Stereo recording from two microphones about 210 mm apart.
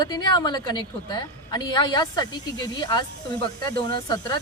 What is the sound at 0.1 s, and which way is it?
A woman's voice, 20° left (ahead or behind).